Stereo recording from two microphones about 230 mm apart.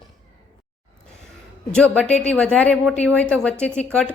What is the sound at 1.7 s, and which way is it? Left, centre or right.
A woman's voice, centre.